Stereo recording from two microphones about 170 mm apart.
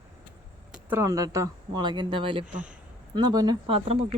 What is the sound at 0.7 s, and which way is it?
Speech, 15° right (ahead or behind).